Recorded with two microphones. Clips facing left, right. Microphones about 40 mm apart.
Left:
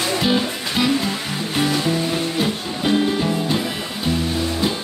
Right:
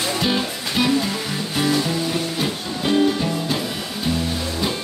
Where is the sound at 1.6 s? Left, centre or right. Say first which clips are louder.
Left 1 dB; centre.